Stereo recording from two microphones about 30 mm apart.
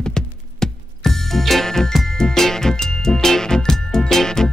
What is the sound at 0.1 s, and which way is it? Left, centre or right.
Music, centre.